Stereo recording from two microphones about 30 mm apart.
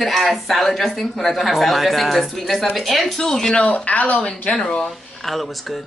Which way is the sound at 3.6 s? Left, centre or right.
Left.